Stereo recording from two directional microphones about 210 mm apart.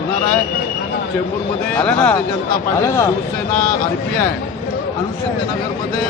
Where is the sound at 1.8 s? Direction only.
5° left (ahead or behind).